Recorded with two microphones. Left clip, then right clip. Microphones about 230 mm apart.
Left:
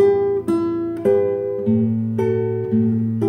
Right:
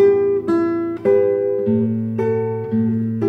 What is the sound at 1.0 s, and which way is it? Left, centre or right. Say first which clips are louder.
Music: right 2 dB; left.